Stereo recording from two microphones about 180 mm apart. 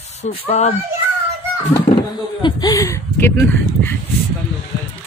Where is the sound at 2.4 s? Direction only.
20° left (ahead or behind).